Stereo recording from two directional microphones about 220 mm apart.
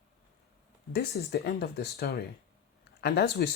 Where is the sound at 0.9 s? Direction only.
45° left (ahead or behind).